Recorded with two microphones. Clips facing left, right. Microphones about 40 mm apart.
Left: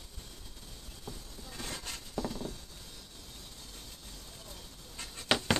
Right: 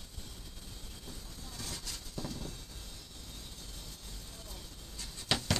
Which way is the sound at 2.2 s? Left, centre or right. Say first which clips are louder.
Left 5 dB; centre.